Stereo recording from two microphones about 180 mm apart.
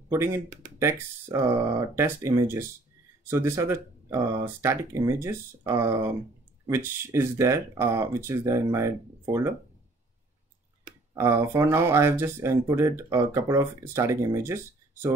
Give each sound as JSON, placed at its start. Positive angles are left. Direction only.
{"t": 0.1, "sound": "speech", "side_deg": -15}
{"t": 11.1, "sound": "speech", "side_deg": -15}